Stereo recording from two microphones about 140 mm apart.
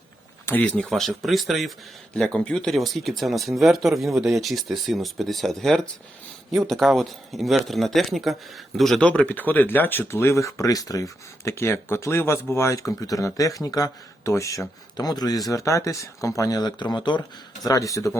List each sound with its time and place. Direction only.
0.4 s speech: 10° left (ahead or behind)